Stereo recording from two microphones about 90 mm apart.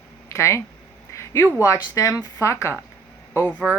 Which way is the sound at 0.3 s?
30° left (ahead or behind).